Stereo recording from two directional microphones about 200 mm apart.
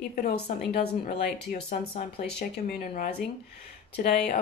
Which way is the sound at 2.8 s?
45° left (ahead or behind).